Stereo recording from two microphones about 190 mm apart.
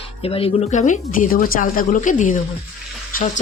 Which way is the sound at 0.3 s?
30° left (ahead or behind).